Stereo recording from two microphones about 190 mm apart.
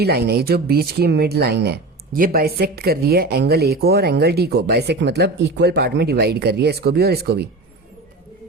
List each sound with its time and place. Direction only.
0.0 s speech: 55° right (ahead or behind)